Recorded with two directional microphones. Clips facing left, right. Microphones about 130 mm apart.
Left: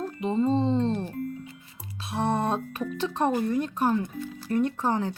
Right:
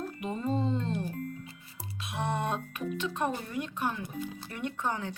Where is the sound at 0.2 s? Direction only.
25° left (ahead or behind).